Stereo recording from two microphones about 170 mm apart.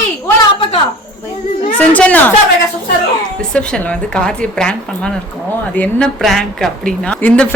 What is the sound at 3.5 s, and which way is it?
A woman's voice, 5° left (ahead or behind).